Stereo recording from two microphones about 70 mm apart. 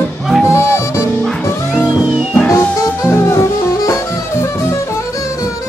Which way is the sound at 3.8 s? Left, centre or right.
Left.